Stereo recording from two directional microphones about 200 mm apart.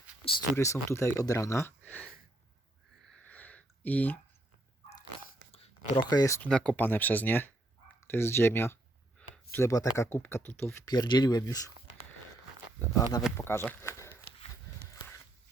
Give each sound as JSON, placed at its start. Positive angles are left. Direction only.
{"t": 0.5, "sound": "speech", "side_deg": 15}
{"t": 3.2, "sound": "a sound", "side_deg": 5}
{"t": 5.5, "sound": "a sound", "side_deg": 35}
{"t": 6.0, "sound": "speech", "side_deg": 20}
{"t": 6.4, "sound": "speech", "side_deg": 5}
{"t": 12.8, "sound": "speech", "side_deg": 15}